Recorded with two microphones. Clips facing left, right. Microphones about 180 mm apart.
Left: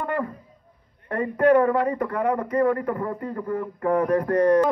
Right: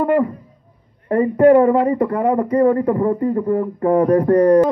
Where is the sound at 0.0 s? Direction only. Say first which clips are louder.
Right 11 dB; 20° right (ahead or behind).